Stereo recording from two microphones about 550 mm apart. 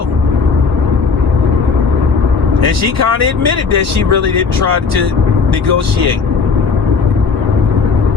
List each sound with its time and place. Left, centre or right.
2.6 s speech: right